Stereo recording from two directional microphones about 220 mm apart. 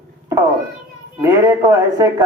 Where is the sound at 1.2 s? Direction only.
15° right (ahead or behind).